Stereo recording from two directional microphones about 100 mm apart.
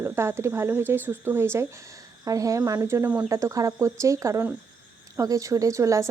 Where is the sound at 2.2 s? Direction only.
35° right (ahead or behind).